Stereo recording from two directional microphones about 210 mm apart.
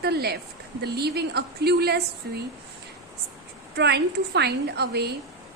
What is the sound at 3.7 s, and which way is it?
A woman's voice, 55° right (ahead or behind).